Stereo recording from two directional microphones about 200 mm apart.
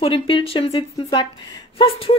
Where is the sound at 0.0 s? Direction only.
25° left (ahead or behind).